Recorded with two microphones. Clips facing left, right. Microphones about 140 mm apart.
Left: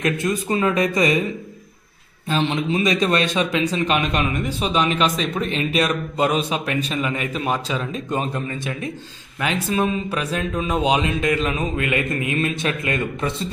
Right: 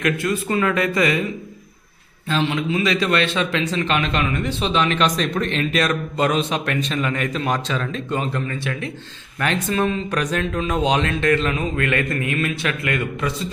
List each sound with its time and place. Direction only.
0.0 s speech: 20° left (ahead or behind)
2.2 s speech: 20° left (ahead or behind)
9.4 s speech: 10° left (ahead or behind); by 13.3 s 25° left (ahead or behind)